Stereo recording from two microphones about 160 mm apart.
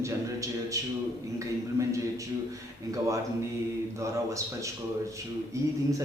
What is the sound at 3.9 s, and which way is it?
Speech, 20° right (ahead or behind).